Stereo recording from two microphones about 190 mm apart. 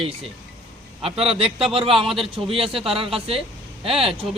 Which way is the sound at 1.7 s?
30° right (ahead or behind).